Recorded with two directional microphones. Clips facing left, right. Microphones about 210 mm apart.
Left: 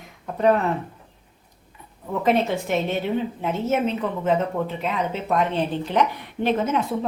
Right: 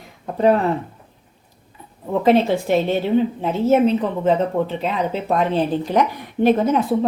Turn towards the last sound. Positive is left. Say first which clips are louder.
# right 6 dB
turn(degrees=-40)  # may be behind; listen again after turning